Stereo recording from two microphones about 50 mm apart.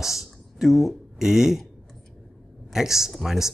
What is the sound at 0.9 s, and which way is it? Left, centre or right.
Speech, centre.